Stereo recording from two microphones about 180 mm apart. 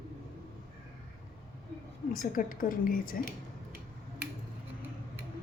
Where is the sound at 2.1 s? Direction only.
50° left (ahead or behind).